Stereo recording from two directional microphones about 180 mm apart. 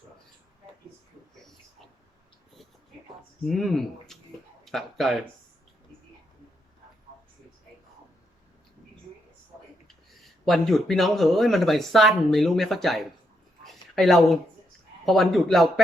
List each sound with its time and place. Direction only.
3.4 s speech: centre (ahead or behind)
4.1 s tick-tock: centre (ahead or behind)
4.6 s speech: centre (ahead or behind)
10.4 s speech: centre (ahead or behind)
13.7 s a sound: centre (ahead or behind)
15.0 s speech: centre (ahead or behind)